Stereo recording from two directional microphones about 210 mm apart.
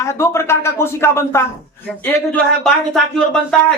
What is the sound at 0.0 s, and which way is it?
Speech, 15° left (ahead or behind).